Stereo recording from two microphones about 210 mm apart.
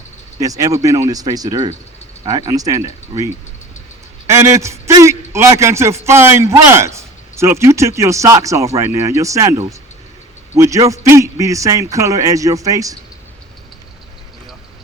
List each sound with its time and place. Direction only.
0.3 s a man's voice: 15° right (ahead or behind)